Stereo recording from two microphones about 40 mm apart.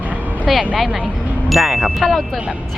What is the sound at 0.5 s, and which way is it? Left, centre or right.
Speech, centre.